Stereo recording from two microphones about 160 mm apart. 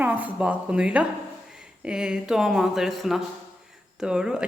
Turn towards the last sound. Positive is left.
turn(degrees=-5)  # may be behind; listen again after turning